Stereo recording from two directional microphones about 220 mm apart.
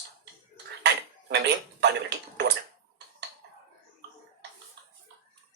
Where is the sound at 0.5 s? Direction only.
50° right (ahead or behind).